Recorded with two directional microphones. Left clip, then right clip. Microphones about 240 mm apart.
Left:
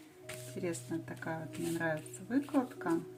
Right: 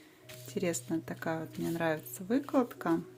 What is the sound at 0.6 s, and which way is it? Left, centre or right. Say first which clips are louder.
Speech: right 6 dB; right.